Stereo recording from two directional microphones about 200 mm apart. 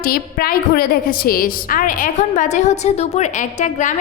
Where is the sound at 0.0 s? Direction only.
50° left (ahead or behind).